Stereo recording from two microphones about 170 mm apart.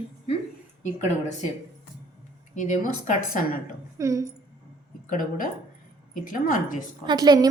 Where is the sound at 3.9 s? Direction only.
20° right (ahead or behind).